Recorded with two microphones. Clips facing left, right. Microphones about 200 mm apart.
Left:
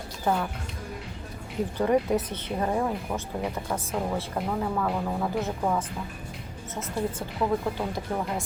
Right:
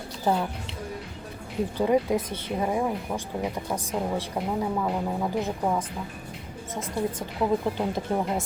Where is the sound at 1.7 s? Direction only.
10° right (ahead or behind).